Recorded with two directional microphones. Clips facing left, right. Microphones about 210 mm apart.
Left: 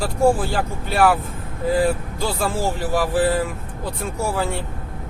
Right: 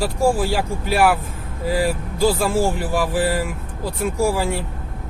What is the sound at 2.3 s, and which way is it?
Speech, 10° right (ahead or behind).